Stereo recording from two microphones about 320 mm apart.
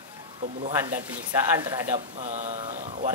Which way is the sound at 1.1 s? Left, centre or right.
Centre.